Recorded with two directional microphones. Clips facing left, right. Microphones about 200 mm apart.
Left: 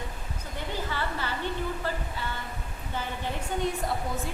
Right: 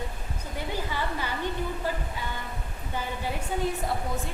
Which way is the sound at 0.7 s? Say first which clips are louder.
Right 1 dB; 15° right (ahead or behind).